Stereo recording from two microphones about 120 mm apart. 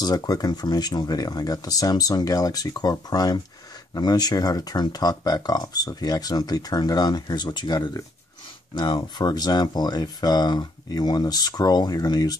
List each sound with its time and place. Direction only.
0.0 s speech: 35° left (ahead or behind)